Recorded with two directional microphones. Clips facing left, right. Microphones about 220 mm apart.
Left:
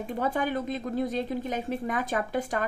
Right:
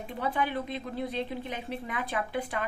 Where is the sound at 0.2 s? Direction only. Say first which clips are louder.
Left 2 dB; 45° left (ahead or behind).